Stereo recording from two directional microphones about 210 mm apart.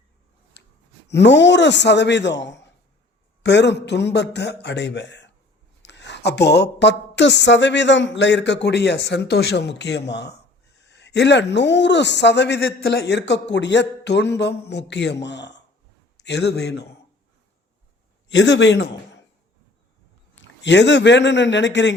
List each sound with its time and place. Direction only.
0.6 s clicking: 55° left (ahead or behind)
1.0 s a woman's voice: 55° left (ahead or behind)
18.3 s a man's voice: 55° left (ahead or behind)
20.4 s a woman's voice: 55° left (ahead or behind)